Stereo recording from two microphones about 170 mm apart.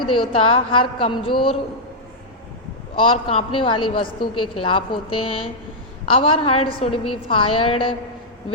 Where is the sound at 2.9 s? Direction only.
30° left (ahead or behind).